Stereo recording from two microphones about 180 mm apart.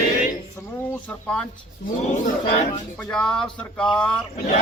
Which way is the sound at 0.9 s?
5° left (ahead or behind).